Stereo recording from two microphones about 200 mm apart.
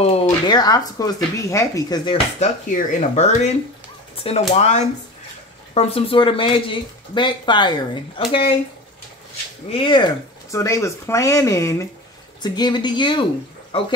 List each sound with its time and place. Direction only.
0.0 s speech: 25° left (ahead or behind)
2.4 s speech: 35° left (ahead or behind)
9.7 s speech: 25° left (ahead or behind)